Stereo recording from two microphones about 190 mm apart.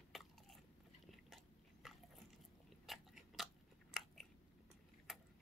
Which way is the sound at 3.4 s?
Centre (ahead or behind).